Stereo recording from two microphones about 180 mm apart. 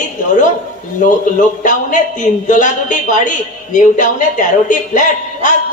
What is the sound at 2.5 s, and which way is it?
A man's voice, 45° left (ahead or behind).